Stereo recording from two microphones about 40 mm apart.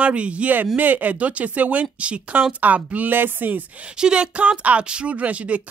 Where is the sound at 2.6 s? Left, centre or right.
Right.